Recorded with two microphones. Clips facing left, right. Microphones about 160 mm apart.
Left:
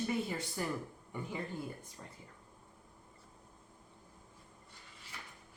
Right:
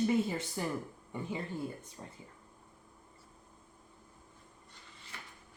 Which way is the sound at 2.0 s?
25° right (ahead or behind).